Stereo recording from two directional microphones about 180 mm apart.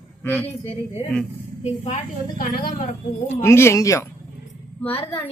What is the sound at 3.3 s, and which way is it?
Speech, 15° left (ahead or behind).